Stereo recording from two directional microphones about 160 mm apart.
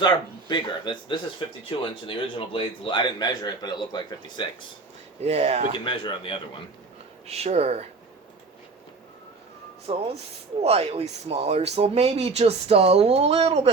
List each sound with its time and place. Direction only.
0.0 s a man's voice: 30° left (ahead or behind)
5.2 s speech: 40° right (ahead or behind)
5.7 s a man's voice: 30° left (ahead or behind)
7.3 s speech: 40° right (ahead or behind)
9.9 s speech: 35° right (ahead or behind)